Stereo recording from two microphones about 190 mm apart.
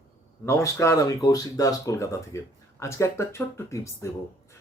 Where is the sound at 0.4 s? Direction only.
15° left (ahead or behind).